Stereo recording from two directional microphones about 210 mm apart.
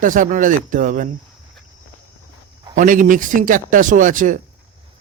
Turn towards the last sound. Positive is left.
turn(degrees=-40)  # may be behind; listen again after turning